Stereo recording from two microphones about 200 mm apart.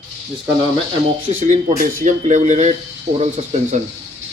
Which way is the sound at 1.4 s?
45° right (ahead or behind).